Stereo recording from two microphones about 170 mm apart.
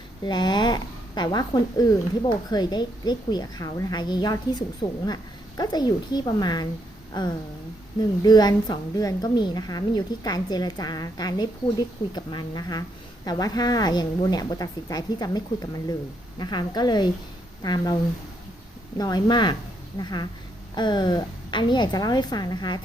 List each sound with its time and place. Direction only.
0.3 s a woman's voice: 25° left (ahead or behind)
18.9 s a woman's voice: 25° left (ahead or behind)